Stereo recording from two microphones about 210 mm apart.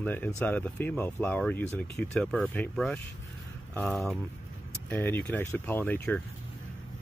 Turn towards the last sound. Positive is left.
turn(degrees=10)  # may be behind; listen again after turning